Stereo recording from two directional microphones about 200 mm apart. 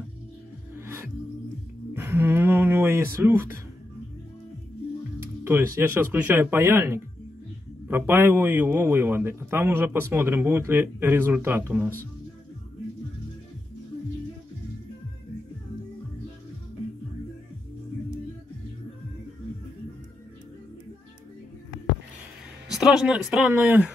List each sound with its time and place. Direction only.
0.7 s music: 10° right (ahead or behind)
2.0 s a sound: 10° right (ahead or behind)
5.4 s a man's voice: 10° right (ahead or behind)
22.7 s a man's voice: 5° right (ahead or behind)